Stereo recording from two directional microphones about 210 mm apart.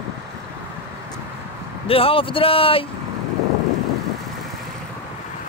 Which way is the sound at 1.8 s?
25° left (ahead or behind).